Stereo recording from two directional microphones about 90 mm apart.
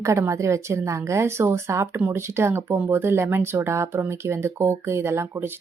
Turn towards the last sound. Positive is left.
turn(degrees=-30)  # may be behind; listen again after turning